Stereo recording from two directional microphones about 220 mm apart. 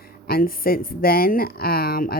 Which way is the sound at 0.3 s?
40° left (ahead or behind).